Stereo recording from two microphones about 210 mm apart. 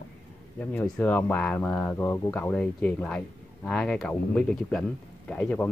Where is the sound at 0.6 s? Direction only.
10° left (ahead or behind).